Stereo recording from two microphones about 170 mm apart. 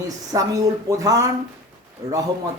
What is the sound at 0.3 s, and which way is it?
Speech, 20° right (ahead or behind).